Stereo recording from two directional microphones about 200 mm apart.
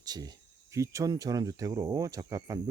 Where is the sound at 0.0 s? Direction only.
20° right (ahead or behind).